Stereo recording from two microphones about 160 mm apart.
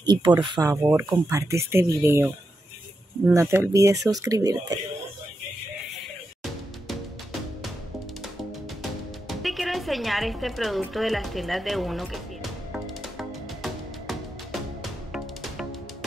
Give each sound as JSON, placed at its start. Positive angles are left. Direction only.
{"t": 0.0, "sound": "speech", "side_deg": -25}
{"t": 3.3, "sound": "speech", "side_deg": -15}
{"t": 9.3, "sound": "music", "side_deg": 0}